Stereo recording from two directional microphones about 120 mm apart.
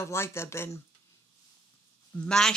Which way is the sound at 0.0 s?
20° left (ahead or behind).